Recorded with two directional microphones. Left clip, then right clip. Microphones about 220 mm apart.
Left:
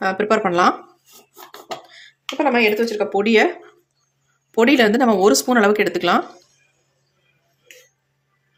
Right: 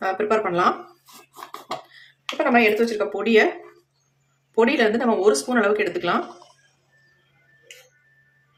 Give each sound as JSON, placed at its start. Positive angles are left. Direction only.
{"t": 0.0, "sound": "speech", "side_deg": 40}
{"t": 2.4, "sound": "speech", "side_deg": 35}
{"t": 4.5, "sound": "speech", "side_deg": 40}